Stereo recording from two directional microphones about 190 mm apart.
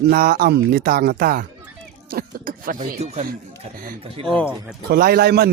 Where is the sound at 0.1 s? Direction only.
50° right (ahead or behind).